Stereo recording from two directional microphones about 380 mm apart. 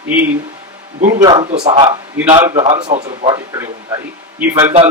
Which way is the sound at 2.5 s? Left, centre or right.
Centre.